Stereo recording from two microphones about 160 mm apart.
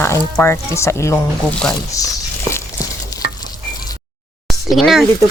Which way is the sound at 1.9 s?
20° left (ahead or behind).